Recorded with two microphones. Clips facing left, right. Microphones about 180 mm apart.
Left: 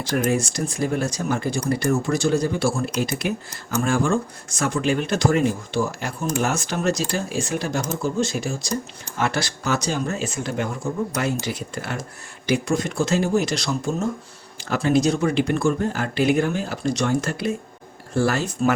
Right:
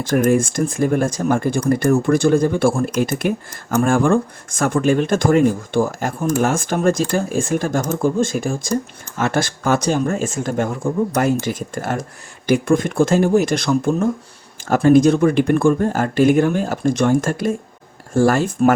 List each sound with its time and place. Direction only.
0.0 s speech: 50° right (ahead or behind)